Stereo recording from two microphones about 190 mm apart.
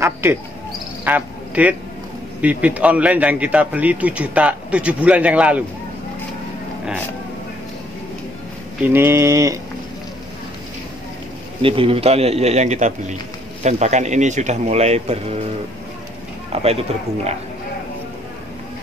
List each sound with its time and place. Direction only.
0.0 s a man's voice: 15° right (ahead or behind)
8.8 s a man's voice: 10° right (ahead or behind)
11.6 s speech: 30° right (ahead or behind)
16.5 s speech: 35° right (ahead or behind)